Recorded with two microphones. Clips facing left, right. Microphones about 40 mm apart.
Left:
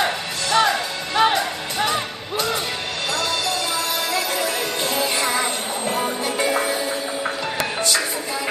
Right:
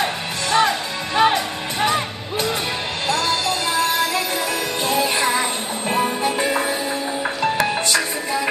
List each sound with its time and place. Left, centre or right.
0.5 s music: right
7.8 s music: right